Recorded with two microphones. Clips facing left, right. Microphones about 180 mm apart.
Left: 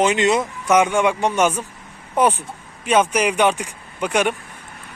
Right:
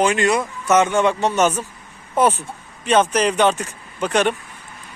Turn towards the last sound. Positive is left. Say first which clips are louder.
# right 1 dB
turn(degrees=10)  # may be behind; listen again after turning